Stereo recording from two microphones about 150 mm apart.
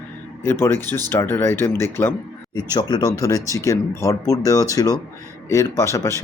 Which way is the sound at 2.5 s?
30° left (ahead or behind).